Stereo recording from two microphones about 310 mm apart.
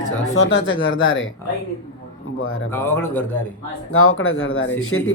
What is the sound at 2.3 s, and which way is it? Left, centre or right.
Speech, left.